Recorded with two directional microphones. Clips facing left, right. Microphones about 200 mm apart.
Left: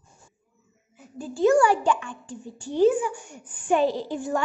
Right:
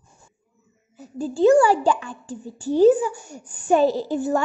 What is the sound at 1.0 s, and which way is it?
A child's voice, 30° right (ahead or behind).